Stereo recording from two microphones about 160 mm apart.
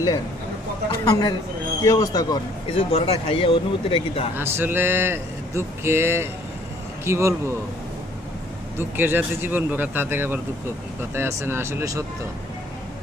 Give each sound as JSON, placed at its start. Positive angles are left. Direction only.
{"t": 0.9, "sound": "speech", "side_deg": 25}
{"t": 2.6, "sound": "speech", "side_deg": 35}
{"t": 4.4, "sound": "speech", "side_deg": -15}
{"t": 8.8, "sound": "speech", "side_deg": -15}